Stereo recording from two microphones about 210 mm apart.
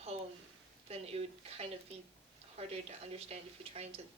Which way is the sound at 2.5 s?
30° right (ahead or behind).